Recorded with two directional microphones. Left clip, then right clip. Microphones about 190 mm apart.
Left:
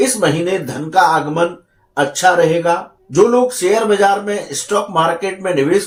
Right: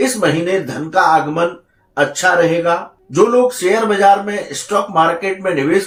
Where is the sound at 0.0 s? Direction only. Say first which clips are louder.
Even; 35° left (ahead or behind).